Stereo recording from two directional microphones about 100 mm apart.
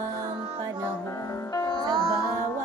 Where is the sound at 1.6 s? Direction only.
45° left (ahead or behind).